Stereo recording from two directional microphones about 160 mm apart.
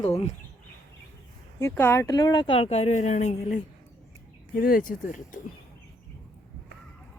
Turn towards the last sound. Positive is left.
turn(degrees=55)  # may be behind; listen again after turning